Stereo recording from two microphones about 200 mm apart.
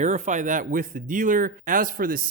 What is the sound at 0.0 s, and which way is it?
Speech, 35° right (ahead or behind).